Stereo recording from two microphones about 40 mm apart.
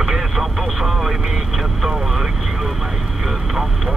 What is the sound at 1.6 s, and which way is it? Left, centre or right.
Vehicle, centre.